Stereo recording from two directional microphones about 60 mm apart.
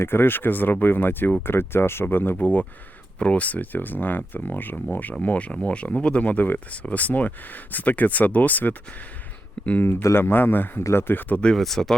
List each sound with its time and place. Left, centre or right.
0.0 s speech: left
2.4 s speech: left
9.8 s speech: left
11.5 s speech: centre